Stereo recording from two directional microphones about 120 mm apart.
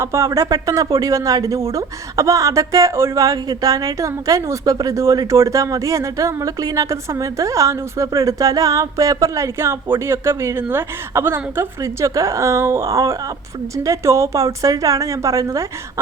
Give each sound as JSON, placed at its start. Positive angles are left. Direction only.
{"t": 0.0, "sound": "speech", "side_deg": -25}